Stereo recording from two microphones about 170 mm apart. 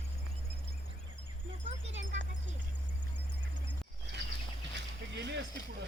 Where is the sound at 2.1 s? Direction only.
45° right (ahead or behind).